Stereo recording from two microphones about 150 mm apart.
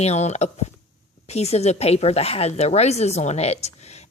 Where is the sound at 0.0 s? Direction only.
45° left (ahead or behind).